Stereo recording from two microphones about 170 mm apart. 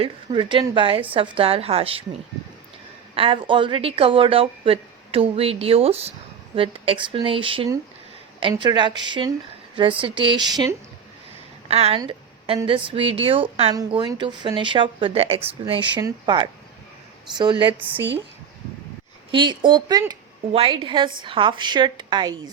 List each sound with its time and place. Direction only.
0.0 s a woman's voice: 30° right (ahead or behind)
3.4 s a woman's voice: 30° right (ahead or behind)
11.7 s a woman's voice: 35° right (ahead or behind)
11.9 s a sound: 30° right (ahead or behind)
12.6 s a woman's voice: 30° right (ahead or behind)
19.3 s a woman's voice: 30° right (ahead or behind)